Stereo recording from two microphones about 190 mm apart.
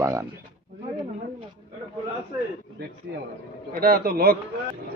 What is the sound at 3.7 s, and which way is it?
Speech, 50° right (ahead or behind).